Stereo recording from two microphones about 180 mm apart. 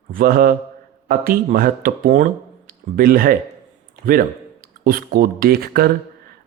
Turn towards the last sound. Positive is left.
turn(degrees=-55)  # may be behind; listen again after turning